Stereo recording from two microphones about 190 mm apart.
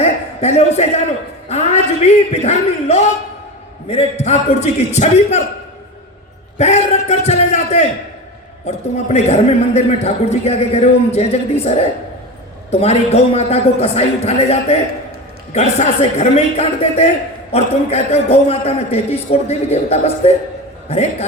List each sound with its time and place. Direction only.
0.0 s a man's voice: 35° left (ahead or behind)
6.6 s a man's voice: 35° left (ahead or behind)